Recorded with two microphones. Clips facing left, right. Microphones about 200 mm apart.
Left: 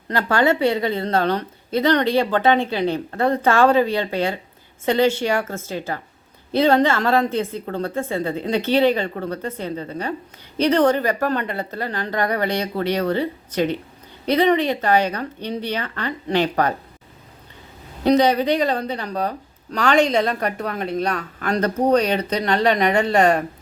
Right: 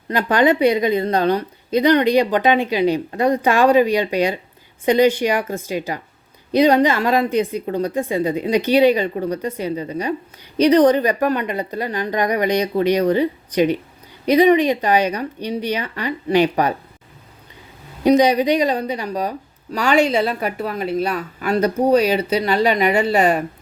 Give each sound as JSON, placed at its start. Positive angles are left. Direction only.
{"t": 0.1, "sound": "a woman's voice", "side_deg": -15}
{"t": 18.0, "sound": "a woman's voice", "side_deg": -15}